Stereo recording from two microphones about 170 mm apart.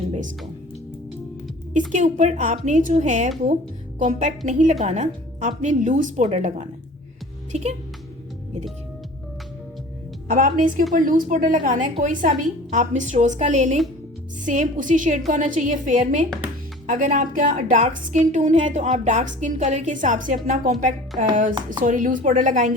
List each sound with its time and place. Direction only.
1.9 s a woman's voice: 45° right (ahead or behind)
10.2 s a woman's voice: 55° right (ahead or behind)